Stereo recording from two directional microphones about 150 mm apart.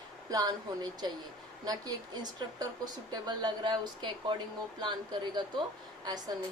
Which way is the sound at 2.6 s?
25° right (ahead or behind).